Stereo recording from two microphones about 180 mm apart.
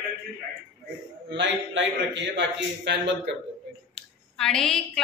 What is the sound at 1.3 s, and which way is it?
A man's voice, 80° right.